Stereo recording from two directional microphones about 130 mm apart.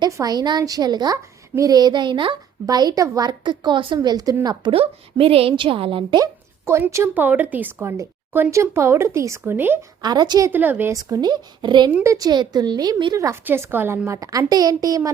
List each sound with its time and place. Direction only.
0.0 s a woman's voice: 30° right (ahead or behind)
4.7 s a woman's voice: 45° right (ahead or behind)
6.2 s a woman's voice: 20° right (ahead or behind)
10.0 s a woman's voice: 35° right (ahead or behind)
10.5 s a woman's voice: 15° right (ahead or behind)
10.9 s a woman's voice: 30° right (ahead or behind)
13.1 s speech: 20° right (ahead or behind)